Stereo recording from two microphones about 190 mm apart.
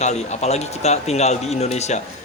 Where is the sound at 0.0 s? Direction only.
35° left (ahead or behind).